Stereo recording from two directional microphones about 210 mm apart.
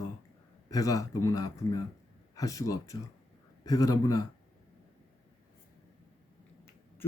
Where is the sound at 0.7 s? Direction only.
15° left (ahead or behind).